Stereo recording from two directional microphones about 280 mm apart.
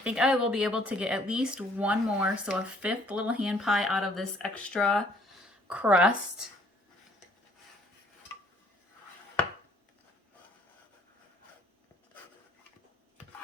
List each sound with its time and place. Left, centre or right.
0.0 s speech: centre